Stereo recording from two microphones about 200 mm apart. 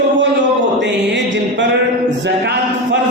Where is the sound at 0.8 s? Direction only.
65° right (ahead or behind).